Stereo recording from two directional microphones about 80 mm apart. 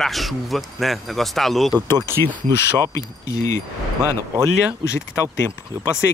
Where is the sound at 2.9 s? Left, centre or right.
Left.